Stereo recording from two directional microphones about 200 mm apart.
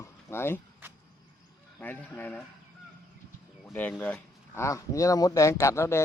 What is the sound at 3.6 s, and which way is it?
Speech, 10° left (ahead or behind).